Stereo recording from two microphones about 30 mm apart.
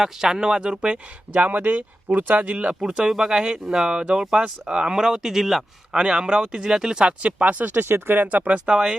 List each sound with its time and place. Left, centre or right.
0.0 s speech: centre
0.9 s speech: right
2.5 s speech: right
2.8 s speech: right; by 5.6 s centre
5.9 s speech: right
7.0 s speech: right
7.4 s speech: right
8.6 s speech: right